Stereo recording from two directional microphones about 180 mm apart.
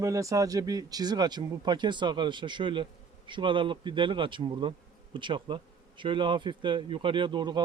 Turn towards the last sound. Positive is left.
turn(degrees=-25)  # may be behind; listen again after turning